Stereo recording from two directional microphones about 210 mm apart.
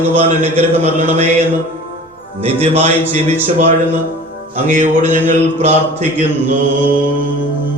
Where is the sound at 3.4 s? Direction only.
35° right (ahead or behind).